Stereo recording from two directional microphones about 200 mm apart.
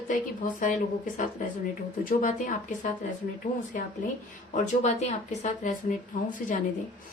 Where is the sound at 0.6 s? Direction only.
40° left (ahead or behind).